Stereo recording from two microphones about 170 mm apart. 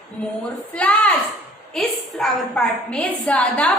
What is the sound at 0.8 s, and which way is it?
A woman's voice, 10° left (ahead or behind).